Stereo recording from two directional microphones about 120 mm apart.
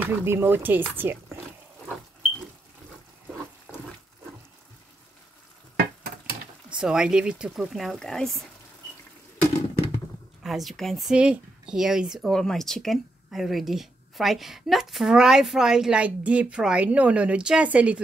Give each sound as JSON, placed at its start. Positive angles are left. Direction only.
{"t": 0.0, "sound": "speech", "side_deg": -20}
{"t": 6.8, "sound": "speech", "side_deg": -5}
{"t": 10.4, "sound": "speech", "side_deg": 0}